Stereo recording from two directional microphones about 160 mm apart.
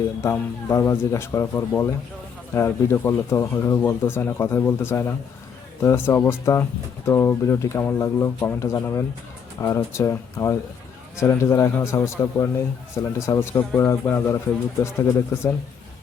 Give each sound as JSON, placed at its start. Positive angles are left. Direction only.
{"t": 0.2, "sound": "speech", "side_deg": 20}